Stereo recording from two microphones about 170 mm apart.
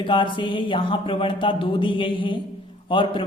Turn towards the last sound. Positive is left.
turn(degrees=30)  # may be behind; listen again after turning